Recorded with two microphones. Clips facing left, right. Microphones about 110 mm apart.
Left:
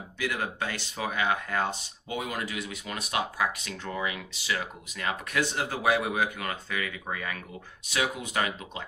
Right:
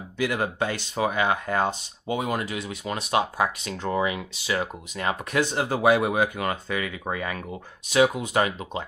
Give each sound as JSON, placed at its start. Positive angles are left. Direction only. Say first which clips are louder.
{"t": 0.3, "sound": "speech", "louder": "right 4 dB", "side_deg": -30}